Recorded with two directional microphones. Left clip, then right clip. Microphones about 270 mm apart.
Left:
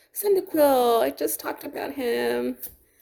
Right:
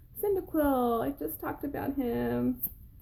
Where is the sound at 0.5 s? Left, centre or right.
Left.